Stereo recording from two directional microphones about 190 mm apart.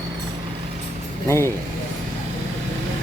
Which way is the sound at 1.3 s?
15° left (ahead or behind).